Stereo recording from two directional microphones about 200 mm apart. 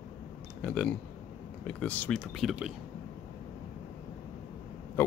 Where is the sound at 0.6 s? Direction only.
5° left (ahead or behind).